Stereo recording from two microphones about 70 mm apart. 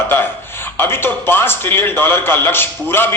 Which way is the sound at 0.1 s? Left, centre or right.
Left.